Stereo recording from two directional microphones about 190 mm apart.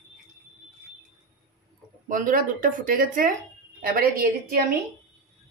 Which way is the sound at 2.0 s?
45° right (ahead or behind).